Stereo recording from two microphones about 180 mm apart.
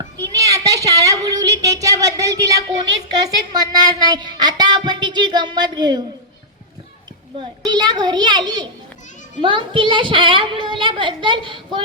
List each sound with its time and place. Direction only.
0.0 s a sound: 20° right (ahead or behind)
3.2 s speech: 20° right (ahead or behind)
7.3 s speech: 25° right (ahead or behind)